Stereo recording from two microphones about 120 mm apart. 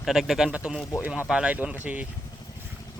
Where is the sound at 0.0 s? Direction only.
5° right (ahead or behind).